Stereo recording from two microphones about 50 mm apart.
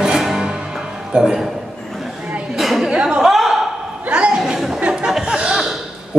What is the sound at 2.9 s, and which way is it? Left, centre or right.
Chuckle, centre.